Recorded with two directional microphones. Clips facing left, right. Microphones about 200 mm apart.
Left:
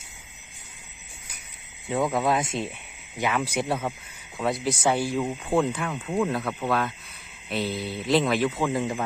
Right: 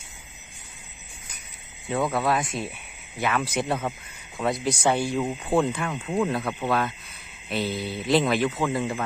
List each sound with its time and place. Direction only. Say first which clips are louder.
1.9 s speech: even; 15° left (ahead or behind)
3.2 s speech: even; 15° left (ahead or behind)
8.5 s speech: even; 15° left (ahead or behind)